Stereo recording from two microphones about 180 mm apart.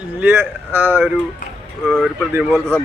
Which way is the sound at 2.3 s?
10° right (ahead or behind).